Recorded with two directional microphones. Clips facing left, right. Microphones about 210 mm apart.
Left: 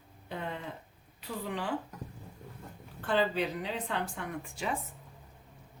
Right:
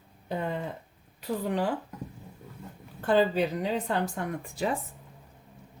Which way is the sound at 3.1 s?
40° right (ahead or behind).